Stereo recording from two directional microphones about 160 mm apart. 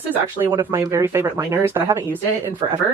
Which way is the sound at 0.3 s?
15° right (ahead or behind).